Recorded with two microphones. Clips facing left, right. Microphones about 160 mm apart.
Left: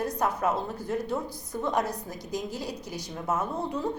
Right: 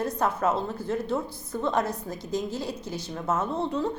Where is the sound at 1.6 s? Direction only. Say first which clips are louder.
Right 2 dB; 15° left (ahead or behind).